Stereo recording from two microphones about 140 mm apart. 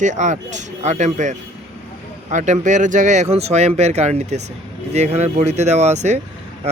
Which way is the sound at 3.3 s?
50° right (ahead or behind).